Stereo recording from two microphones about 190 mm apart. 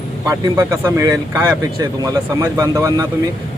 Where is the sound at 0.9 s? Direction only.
15° right (ahead or behind).